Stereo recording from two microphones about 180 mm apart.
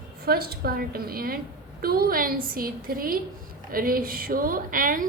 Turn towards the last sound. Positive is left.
turn(degrees=-50)  # may be behind; listen again after turning